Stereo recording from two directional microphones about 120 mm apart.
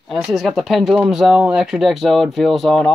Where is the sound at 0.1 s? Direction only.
Centre (ahead or behind).